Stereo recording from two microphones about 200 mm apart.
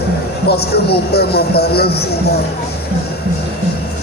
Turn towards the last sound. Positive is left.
turn(degrees=50)  # may be behind; listen again after turning